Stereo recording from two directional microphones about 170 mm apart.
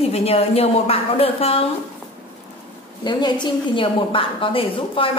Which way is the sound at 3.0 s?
25° left (ahead or behind).